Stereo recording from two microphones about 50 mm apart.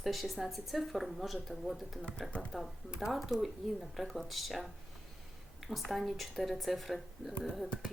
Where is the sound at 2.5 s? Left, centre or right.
Centre.